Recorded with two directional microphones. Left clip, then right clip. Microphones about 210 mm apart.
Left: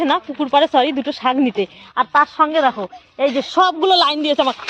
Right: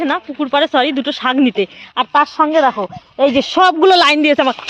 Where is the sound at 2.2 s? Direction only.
35° right (ahead or behind).